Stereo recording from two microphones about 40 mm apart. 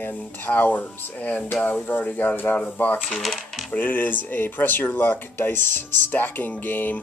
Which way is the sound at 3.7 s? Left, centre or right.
Left.